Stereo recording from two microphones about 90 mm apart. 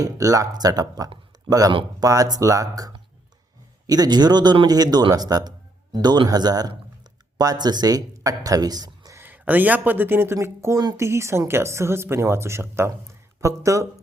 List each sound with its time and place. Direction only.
0.0 s speech: 40° right (ahead or behind)
9.1 s speech: 20° right (ahead or behind)